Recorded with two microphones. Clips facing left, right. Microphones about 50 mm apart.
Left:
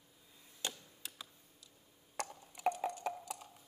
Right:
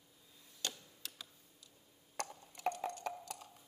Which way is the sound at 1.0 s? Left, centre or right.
Centre.